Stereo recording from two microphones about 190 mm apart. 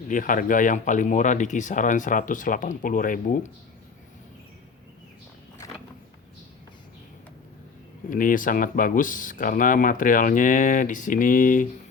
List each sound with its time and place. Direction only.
0.1 s speech: 45° left (ahead or behind)
8.1 s speech: 45° left (ahead or behind)